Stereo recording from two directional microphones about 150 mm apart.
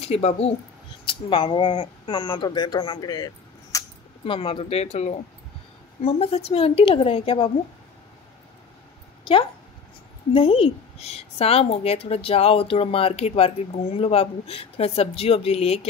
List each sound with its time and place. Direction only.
0.0 s speech: 45° left (ahead or behind); by 3.8 s 25° left (ahead or behind)
4.2 s a woman's voice: 40° left (ahead or behind)
9.2 s a woman's voice: 35° left (ahead or behind)